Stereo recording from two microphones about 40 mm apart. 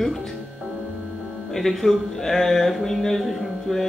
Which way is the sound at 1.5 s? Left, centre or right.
Centre.